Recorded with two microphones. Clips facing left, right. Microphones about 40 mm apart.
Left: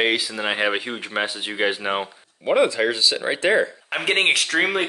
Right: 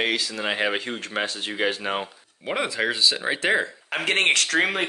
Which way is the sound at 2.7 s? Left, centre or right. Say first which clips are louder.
Left 2 dB; centre.